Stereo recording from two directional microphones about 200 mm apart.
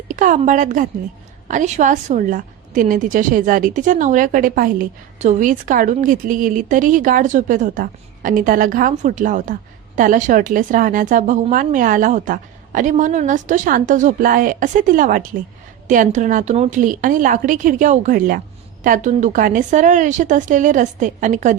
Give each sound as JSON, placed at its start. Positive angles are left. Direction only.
{"t": 0.1, "sound": "a woman's voice", "side_deg": -40}